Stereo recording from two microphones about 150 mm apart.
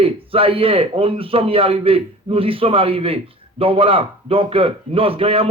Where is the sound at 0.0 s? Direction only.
40° right (ahead or behind).